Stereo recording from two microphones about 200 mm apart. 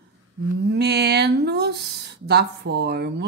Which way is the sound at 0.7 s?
55° right (ahead or behind).